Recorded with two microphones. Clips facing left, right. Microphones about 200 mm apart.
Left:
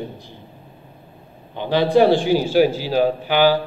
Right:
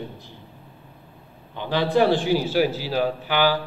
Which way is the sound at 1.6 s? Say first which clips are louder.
Left 5 dB; 20° left (ahead or behind).